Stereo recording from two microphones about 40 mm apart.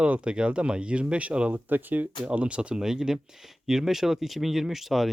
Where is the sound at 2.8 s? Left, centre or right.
Centre.